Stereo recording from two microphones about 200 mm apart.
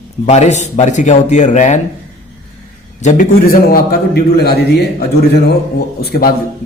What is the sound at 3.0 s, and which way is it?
A man's voice, 45° left (ahead or behind).